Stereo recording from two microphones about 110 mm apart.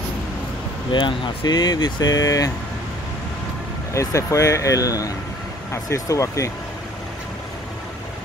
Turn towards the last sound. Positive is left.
turn(degrees=30)  # may be behind; listen again after turning